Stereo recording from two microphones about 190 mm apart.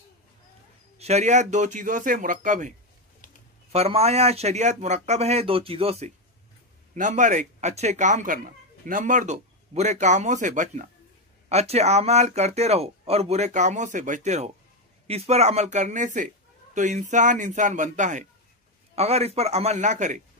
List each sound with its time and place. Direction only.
0.9 s speech: 35° right (ahead or behind)
3.7 s speech: 35° right (ahead or behind)